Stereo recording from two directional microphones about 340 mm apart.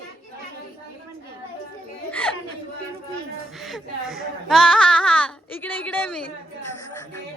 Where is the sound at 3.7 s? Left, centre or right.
Centre.